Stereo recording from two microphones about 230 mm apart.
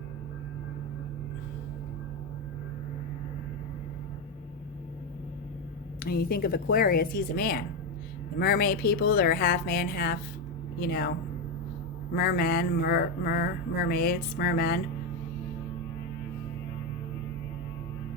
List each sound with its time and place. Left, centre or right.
6.0 s mantra: left
12.1 s mantra: left